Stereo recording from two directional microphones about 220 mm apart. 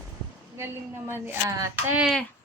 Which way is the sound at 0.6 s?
10° right (ahead or behind).